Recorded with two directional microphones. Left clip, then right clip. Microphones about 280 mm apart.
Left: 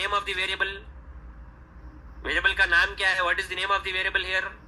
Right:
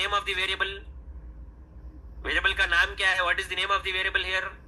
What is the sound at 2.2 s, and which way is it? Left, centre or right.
A man's voice, centre.